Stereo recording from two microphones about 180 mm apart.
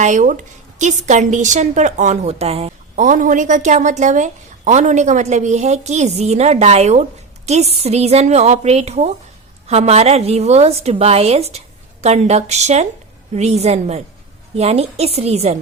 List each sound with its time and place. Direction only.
0.0 s a woman's voice: 45° right (ahead or behind)